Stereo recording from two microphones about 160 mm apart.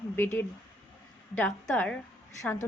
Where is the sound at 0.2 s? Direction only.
10° left (ahead or behind).